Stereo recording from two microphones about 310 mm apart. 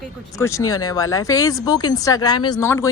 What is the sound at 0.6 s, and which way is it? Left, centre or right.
Speech, left.